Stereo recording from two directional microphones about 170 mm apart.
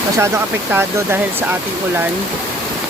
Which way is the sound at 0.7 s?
15° right (ahead or behind).